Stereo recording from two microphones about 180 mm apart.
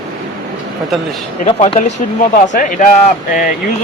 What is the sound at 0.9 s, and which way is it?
Speech, centre (ahead or behind).